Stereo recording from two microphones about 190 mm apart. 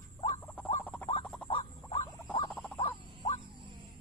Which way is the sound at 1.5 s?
30° left (ahead or behind).